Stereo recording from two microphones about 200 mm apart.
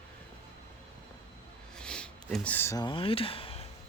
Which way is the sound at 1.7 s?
5° left (ahead or behind).